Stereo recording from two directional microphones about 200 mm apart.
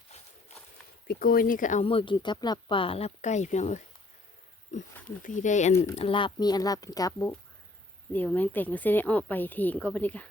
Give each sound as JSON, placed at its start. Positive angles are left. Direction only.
{"t": 1.0, "sound": "speech", "side_deg": 45}
{"t": 5.7, "sound": "speech", "side_deg": 15}
{"t": 6.0, "sound": "speech", "side_deg": 25}